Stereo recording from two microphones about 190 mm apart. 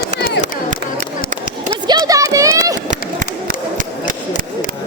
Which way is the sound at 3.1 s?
45° right (ahead or behind).